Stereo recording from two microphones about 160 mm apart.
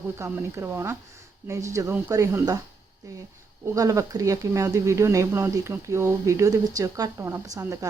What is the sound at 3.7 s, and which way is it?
Speech, 20° right (ahead or behind).